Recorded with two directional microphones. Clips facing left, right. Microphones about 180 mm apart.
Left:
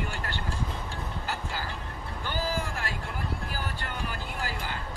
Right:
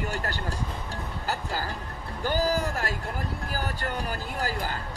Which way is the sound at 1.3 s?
40° right (ahead or behind).